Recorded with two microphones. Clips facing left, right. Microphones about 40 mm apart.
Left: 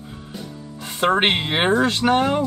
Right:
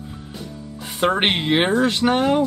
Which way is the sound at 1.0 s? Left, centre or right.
Centre.